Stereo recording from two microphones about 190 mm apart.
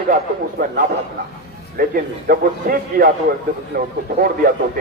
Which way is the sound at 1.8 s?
50° right (ahead or behind).